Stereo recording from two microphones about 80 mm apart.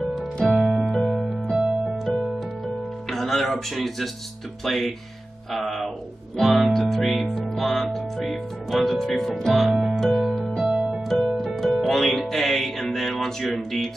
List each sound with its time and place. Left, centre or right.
0.5 s music: centre